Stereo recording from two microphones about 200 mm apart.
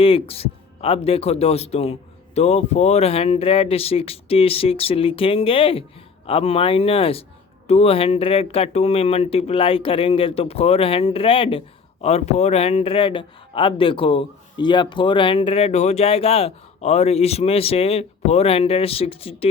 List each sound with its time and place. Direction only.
0.0 s a man's voice: 30° left (ahead or behind)